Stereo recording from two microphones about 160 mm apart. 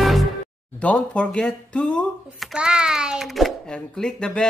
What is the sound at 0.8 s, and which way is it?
Speech, 10° left (ahead or behind).